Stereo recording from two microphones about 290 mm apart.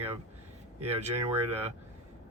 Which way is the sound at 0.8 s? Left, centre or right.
Right.